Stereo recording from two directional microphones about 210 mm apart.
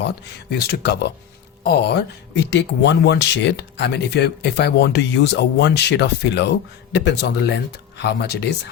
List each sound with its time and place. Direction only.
0.5 s speech: 50° left (ahead or behind)